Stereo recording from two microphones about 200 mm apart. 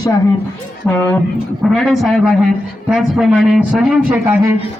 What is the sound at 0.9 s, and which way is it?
Speech, 10° left (ahead or behind).